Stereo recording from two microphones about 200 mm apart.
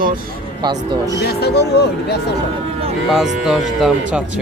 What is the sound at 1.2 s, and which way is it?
Speech, 55° left (ahead or behind).